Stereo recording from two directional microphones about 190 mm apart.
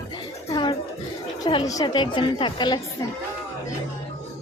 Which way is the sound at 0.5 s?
25° left (ahead or behind).